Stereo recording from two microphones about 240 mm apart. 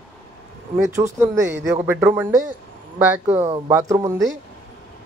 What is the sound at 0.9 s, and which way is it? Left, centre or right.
Speech, centre.